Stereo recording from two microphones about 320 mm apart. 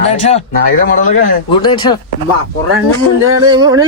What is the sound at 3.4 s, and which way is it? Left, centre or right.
Speech, centre.